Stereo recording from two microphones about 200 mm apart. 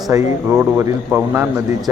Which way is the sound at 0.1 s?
15° right (ahead or behind).